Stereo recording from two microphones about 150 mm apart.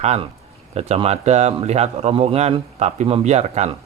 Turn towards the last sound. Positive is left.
turn(degrees=-45)  # may be behind; listen again after turning